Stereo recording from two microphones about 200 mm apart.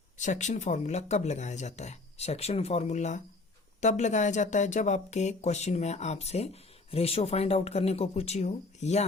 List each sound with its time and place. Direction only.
0.2 s speech: 35° left (ahead or behind)